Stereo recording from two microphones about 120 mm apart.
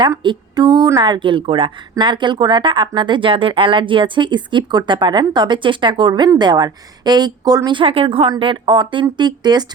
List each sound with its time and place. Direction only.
0.2 s a woman's voice: 40° right (ahead or behind)